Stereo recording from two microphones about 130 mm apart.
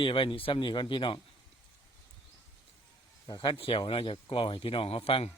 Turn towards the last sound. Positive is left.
turn(degrees=45)  # may be behind; listen again after turning